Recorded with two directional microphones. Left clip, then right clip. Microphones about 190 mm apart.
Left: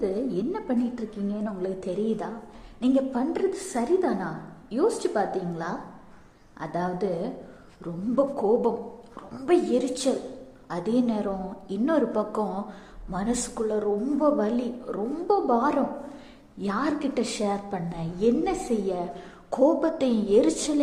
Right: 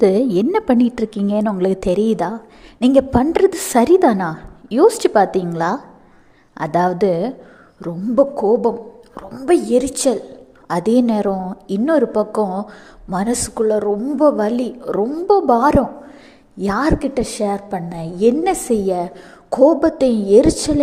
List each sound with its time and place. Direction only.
0.0 s a woman's voice: 55° right (ahead or behind)
7.8 s a woman's voice: 35° right (ahead or behind)